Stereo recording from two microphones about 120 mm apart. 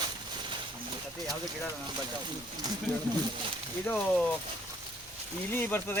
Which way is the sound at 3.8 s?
10° left (ahead or behind).